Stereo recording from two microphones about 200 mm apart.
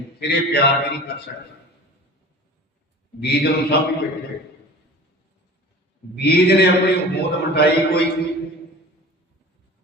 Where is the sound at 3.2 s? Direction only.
55° left (ahead or behind).